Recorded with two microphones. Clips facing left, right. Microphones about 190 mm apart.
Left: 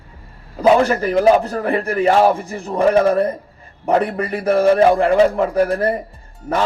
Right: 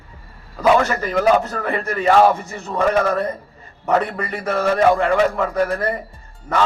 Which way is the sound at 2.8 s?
30° left (ahead or behind).